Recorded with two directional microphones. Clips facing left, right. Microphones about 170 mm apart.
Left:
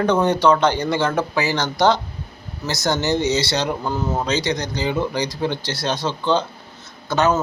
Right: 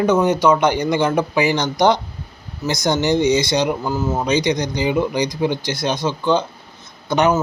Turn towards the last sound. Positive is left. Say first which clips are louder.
# right 2 dB
turn(degrees=-15)  # may be behind; listen again after turning